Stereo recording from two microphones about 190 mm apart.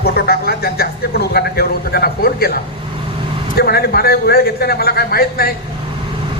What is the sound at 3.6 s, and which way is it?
A man's voice, 55° left (ahead or behind).